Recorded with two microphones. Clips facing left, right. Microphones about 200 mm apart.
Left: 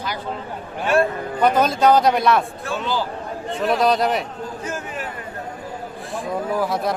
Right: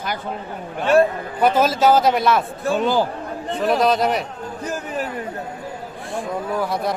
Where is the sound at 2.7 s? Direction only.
50° right (ahead or behind).